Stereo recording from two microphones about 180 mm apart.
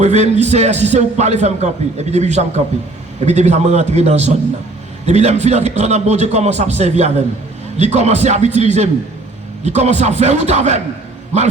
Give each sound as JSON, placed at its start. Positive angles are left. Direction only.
{"t": 0.0, "sound": "a man's voice", "side_deg": -40}